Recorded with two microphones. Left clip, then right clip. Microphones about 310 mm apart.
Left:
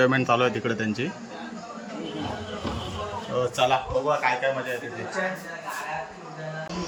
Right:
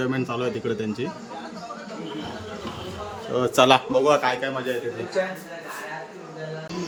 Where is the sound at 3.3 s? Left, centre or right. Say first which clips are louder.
Right 5 dB; centre.